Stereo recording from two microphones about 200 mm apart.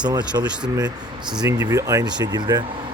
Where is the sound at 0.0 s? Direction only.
20° right (ahead or behind).